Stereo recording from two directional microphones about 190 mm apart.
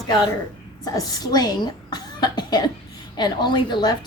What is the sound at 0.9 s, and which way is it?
A woman's voice, 20° left (ahead or behind).